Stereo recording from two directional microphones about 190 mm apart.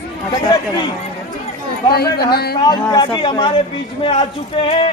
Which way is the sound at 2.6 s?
20° left (ahead or behind).